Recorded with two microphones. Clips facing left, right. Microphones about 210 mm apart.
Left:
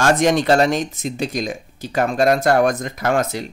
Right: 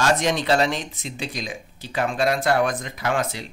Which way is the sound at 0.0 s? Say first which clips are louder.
Left 5 dB; 50° left (ahead or behind).